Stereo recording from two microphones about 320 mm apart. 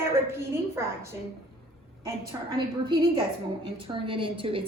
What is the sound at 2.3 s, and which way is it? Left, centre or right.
Speech, centre.